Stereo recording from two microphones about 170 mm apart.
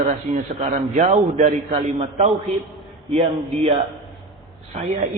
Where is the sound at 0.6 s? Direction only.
45° right (ahead or behind).